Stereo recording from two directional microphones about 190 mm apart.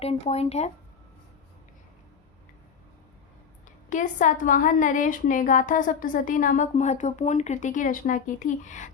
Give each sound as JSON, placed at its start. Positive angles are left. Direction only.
{"t": 0.0, "sound": "speech", "side_deg": 35}
{"t": 3.8, "sound": "a woman's voice", "side_deg": 40}